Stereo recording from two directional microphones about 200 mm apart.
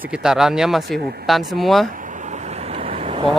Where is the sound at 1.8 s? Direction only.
40° right (ahead or behind).